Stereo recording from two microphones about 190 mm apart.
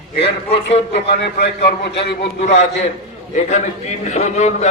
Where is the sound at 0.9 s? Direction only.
60° left (ahead or behind).